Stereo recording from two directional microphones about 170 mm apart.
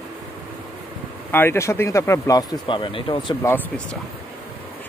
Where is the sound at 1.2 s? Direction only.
15° left (ahead or behind); by 3.4 s 30° left (ahead or behind).